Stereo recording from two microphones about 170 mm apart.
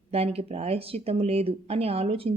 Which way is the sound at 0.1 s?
35° right (ahead or behind).